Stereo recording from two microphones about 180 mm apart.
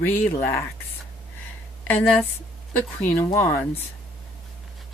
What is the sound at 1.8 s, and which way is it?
Speech, 10° left (ahead or behind).